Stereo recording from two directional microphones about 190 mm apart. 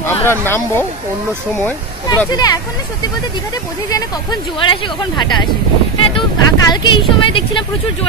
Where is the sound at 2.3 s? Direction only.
20° left (ahead or behind).